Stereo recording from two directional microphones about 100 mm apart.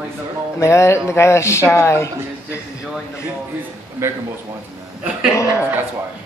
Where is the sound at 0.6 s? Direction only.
30° left (ahead or behind).